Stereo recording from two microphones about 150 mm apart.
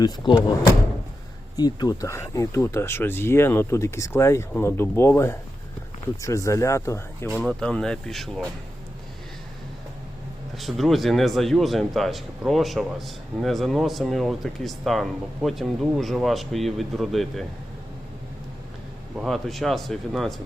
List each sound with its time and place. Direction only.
0.2 s speech: 30° left (ahead or behind)
1.5 s speech: 25° left (ahead or behind)
7.4 s speech: 5° left (ahead or behind)
10.5 s speech: centre (ahead or behind)
19.1 s speech: centre (ahead or behind)